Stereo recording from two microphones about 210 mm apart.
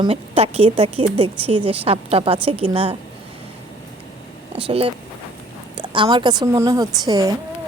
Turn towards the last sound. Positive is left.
turn(degrees=-15)  # may be behind; listen again after turning